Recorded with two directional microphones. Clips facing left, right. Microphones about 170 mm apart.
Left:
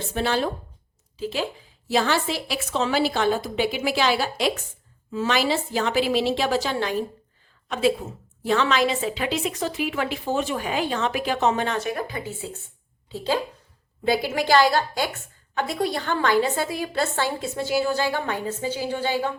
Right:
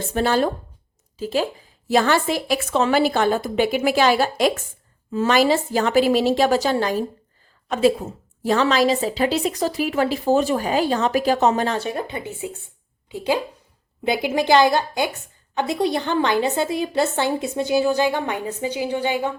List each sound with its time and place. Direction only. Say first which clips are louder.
0.1 s a woman's voice: right 5 dB; 45° right (ahead or behind); by 19.3 s 15° right (ahead or behind)